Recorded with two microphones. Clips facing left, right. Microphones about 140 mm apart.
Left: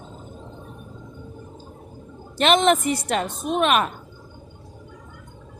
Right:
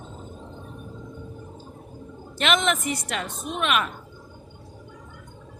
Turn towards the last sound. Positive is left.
turn(degrees=40)  # may be behind; listen again after turning